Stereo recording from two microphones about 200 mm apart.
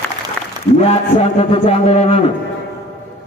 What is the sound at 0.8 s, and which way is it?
A man's voice, 30° left (ahead or behind).